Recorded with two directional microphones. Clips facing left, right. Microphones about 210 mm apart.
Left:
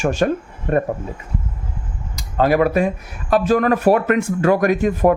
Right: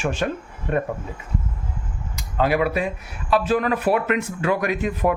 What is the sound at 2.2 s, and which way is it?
Speech, 40° left (ahead or behind).